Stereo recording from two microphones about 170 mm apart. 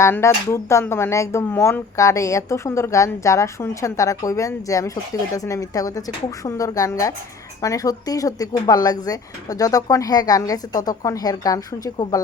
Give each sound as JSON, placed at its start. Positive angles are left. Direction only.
{"t": 0.0, "sound": "speech", "side_deg": 15}